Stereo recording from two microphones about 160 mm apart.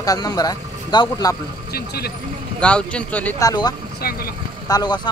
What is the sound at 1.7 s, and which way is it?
Speech, 75° left (ahead or behind).